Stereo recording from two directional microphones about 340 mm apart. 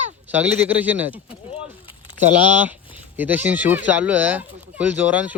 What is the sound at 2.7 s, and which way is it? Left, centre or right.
Speech, centre.